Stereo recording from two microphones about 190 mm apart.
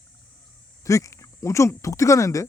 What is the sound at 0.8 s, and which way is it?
Speech, 15° left (ahead or behind).